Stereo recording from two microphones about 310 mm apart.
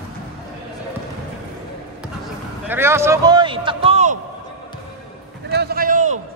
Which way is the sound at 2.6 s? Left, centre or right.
Centre.